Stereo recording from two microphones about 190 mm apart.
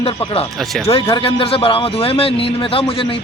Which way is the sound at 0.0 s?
25° left (ahead or behind).